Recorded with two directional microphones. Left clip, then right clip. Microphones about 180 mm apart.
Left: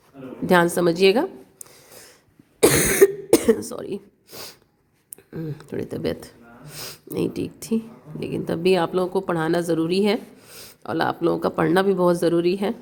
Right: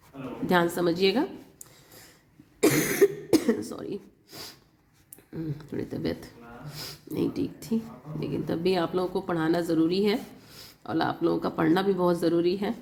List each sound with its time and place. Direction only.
0.4 s speech: 40° left (ahead or behind)
2.6 s cough: 45° left (ahead or behind)
5.3 s speech: 40° left (ahead or behind)